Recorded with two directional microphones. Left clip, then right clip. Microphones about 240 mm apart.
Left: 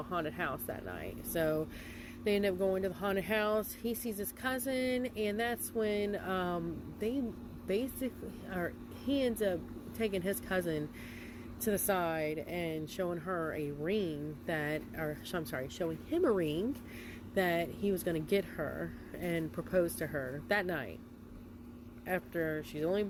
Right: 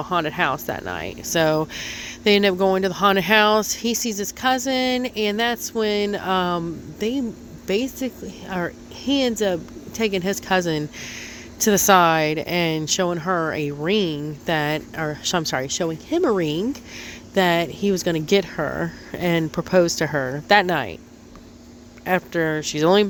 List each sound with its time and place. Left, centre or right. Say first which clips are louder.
0.1 s speech: right 16 dB; right
22.0 s speech: right 14 dB; right